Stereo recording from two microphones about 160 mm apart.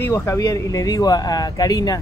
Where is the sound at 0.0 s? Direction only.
15° left (ahead or behind).